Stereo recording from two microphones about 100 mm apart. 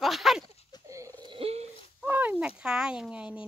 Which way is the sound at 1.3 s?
85° right.